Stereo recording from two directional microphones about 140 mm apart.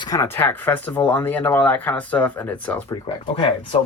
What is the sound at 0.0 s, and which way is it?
Speech, 25° left (ahead or behind).